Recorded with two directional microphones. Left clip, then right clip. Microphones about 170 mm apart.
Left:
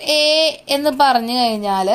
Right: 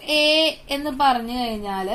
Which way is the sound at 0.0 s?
40° left (ahead or behind).